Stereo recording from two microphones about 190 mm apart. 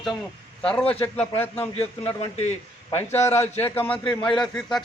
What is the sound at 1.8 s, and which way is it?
Speech, 35° left (ahead or behind).